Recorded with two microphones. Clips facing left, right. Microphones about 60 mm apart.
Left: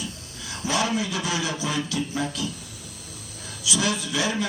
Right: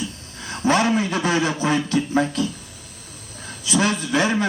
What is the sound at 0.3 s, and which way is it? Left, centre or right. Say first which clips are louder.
A man's voice: right 7 dB; right.